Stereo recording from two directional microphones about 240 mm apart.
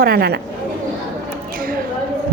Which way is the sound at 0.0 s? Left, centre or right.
Right.